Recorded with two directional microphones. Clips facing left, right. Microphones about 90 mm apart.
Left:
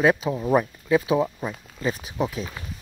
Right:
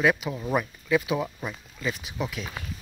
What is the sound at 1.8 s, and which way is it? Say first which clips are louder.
Speech: left 5 dB; 35° left (ahead or behind).